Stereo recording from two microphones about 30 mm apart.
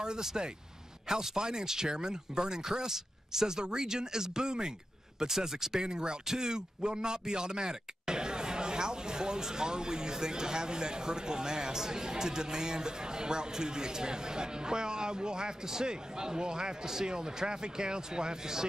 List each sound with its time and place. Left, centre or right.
0.0 s speech: right